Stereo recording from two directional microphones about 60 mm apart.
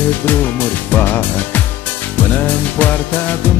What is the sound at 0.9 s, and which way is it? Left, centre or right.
Music, left.